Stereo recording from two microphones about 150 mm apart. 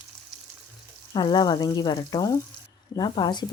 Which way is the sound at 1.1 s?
30° left (ahead or behind).